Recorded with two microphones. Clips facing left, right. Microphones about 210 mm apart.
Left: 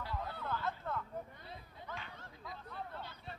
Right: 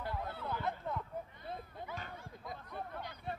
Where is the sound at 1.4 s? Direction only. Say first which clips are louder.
Right 7 dB; 50° right (ahead or behind).